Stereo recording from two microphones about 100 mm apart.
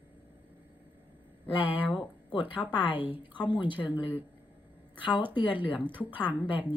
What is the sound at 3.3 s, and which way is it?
Speech, 50° left (ahead or behind).